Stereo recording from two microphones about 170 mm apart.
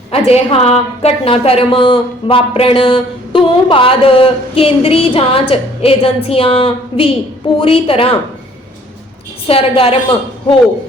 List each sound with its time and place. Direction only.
0.1 s a woman's voice: 35° left (ahead or behind)
9.5 s a woman's voice: 35° left (ahead or behind)